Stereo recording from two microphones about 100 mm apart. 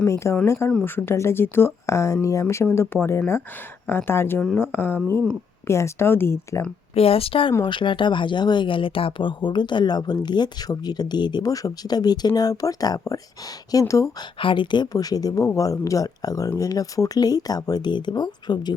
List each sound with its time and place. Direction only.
0.0 s speech: 30° left (ahead or behind)
6.9 s speech: 75° left (ahead or behind)
7.6 s speech: 55° left (ahead or behind); by 14.1 s 30° left (ahead or behind)
14.2 s speech: 60° left (ahead or behind)